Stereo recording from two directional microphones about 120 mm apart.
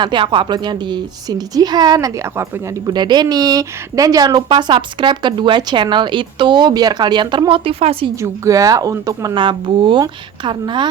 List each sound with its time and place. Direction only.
0.0 s speech: 40° right (ahead or behind)
8.2 s speech: 30° right (ahead or behind)
9.3 s speech: 40° right (ahead or behind)